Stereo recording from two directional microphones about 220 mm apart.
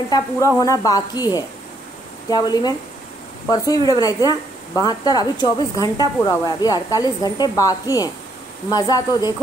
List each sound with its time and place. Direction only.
0.6 s speech: 15° left (ahead or behind)